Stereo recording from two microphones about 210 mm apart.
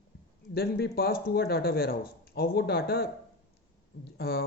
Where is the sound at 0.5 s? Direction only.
45° left (ahead or behind).